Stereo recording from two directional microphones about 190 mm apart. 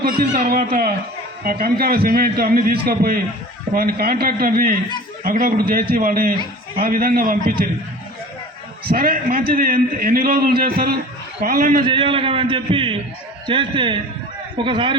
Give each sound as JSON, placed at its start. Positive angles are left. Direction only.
{"t": 0.0, "sound": "a man's voice", "side_deg": -50}
{"t": 8.9, "sound": "a man's voice", "side_deg": -50}
{"t": 11.9, "sound": "a man's voice", "side_deg": -25}